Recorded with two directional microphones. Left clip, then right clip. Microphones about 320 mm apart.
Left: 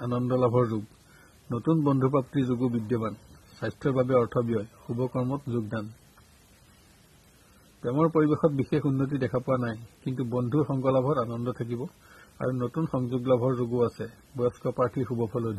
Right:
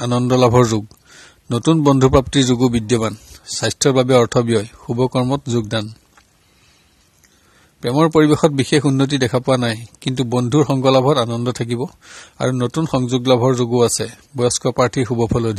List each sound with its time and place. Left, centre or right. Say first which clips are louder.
0.0 s a man's voice: right 11 dB; right
7.8 s a man's voice: right 10 dB; right